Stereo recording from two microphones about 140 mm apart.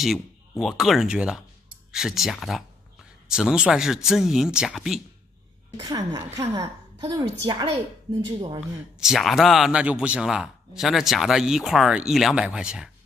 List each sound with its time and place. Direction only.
0.0 s speech: centre (ahead or behind)
5.8 s a woman's voice: 25° right (ahead or behind)
9.0 s a man's voice: centre (ahead or behind)